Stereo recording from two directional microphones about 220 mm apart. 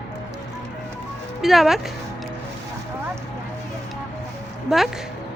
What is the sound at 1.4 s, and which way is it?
Speech, centre (ahead or behind).